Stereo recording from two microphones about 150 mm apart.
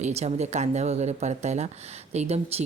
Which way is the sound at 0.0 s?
45° right (ahead or behind).